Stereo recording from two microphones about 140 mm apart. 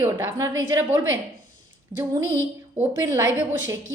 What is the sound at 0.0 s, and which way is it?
A woman's voice, 20° right (ahead or behind).